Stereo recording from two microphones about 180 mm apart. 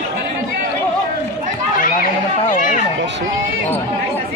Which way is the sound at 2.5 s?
45° left (ahead or behind).